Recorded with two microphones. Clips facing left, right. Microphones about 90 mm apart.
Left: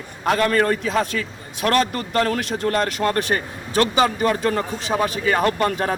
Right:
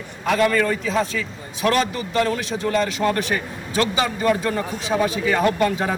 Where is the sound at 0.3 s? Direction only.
45° left (ahead or behind).